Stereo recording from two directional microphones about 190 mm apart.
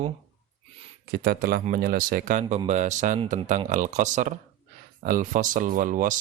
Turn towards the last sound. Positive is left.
turn(degrees=-45)  # may be behind; listen again after turning